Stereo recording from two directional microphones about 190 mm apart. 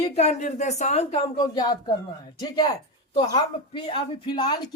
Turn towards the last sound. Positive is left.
turn(degrees=25)  # may be behind; listen again after turning